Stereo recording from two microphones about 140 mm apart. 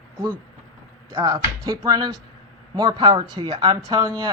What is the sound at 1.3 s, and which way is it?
Speech, 25° right (ahead or behind).